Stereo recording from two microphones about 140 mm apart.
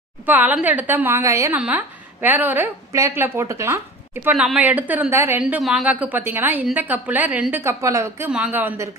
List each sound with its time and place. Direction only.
0.3 s speech: 10° right (ahead or behind)
5.4 s speech: 5° right (ahead or behind)